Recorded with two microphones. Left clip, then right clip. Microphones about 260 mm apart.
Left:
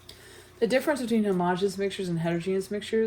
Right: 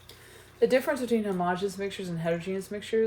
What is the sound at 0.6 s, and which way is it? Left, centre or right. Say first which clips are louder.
A woman's voice: right 1 dB; left.